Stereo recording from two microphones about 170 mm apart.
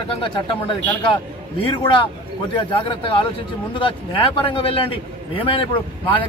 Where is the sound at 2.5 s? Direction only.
30° left (ahead or behind).